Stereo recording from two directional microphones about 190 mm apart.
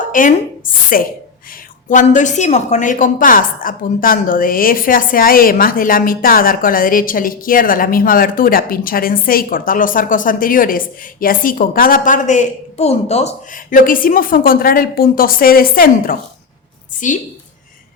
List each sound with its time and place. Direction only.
0.1 s a woman's voice: 45° left (ahead or behind)